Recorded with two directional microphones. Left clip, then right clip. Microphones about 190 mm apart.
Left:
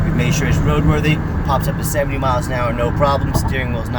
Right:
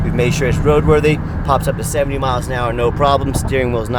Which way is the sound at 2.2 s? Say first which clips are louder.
Even; 30° right (ahead or behind).